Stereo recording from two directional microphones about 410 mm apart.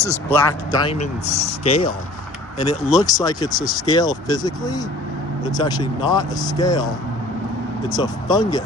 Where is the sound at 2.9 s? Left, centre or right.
Centre.